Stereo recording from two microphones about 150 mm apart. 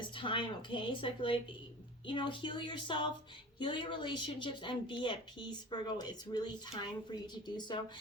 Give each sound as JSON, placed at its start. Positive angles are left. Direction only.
{"t": 0.0, "sound": "speech", "side_deg": 35}